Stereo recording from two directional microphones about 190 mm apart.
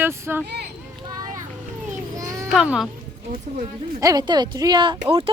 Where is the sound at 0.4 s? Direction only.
60° right (ahead or behind).